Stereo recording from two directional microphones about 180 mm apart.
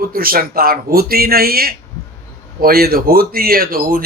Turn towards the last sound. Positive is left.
turn(degrees=-50)  # may be behind; listen again after turning